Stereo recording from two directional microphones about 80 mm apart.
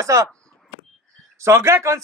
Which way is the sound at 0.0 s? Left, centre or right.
Right.